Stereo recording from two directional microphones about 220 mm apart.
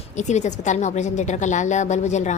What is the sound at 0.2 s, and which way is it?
A woman's voice, 30° left (ahead or behind).